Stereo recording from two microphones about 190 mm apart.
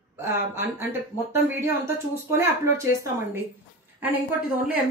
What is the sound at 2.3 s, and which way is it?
Speech, 15° right (ahead or behind).